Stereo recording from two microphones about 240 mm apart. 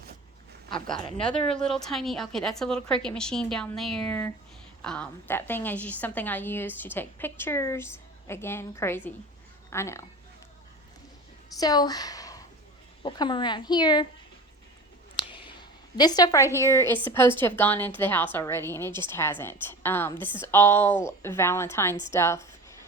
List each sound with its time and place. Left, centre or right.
1.5 s a woman's voice: centre
11.6 s speech: centre
15.2 s a sound: left
16.0 s a woman's voice: centre